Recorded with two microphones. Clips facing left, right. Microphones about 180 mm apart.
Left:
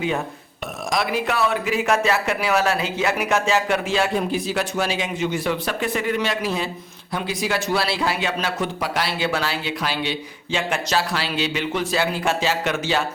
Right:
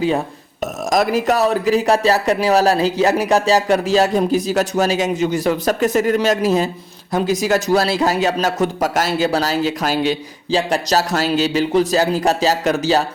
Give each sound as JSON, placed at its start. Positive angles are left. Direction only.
{"t": 0.6, "sound": "speech", "side_deg": -45}